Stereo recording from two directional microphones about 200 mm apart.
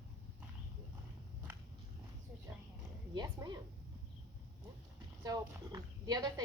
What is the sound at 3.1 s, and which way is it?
Speech, 20° right (ahead or behind).